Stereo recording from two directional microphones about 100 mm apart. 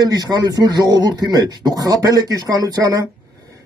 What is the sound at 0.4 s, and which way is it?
Speech, 40° right (ahead or behind).